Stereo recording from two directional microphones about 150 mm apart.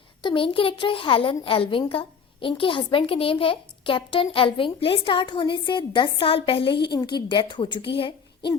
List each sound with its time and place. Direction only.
0.2 s a child's voice: 35° left (ahead or behind)